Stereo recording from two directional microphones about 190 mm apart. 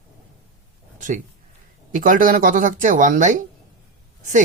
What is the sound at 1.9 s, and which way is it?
A woman's voice, 45° right (ahead or behind).